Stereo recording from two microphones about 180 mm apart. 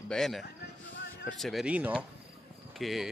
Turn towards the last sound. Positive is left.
turn(degrees=0)  # may be behind; listen again after turning